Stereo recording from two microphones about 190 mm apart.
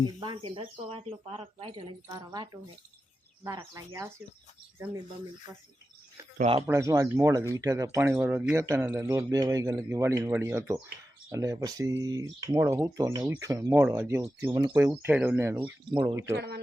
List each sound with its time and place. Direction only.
0.2 s speech: 25° right (ahead or behind)
6.7 s speech: 15° right (ahead or behind)
15.9 s speech: 25° right (ahead or behind)
16.2 s speech: 60° right (ahead or behind)